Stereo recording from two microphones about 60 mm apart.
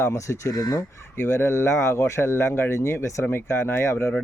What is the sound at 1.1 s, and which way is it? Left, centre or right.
Speech, left.